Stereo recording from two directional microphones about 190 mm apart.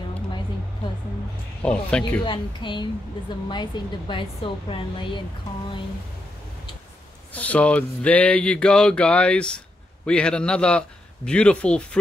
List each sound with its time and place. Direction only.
1.6 s speech: 5° left (ahead or behind)
2.2 s a woman's voice: 25° left (ahead or behind)
7.3 s a sound: 5° left (ahead or behind)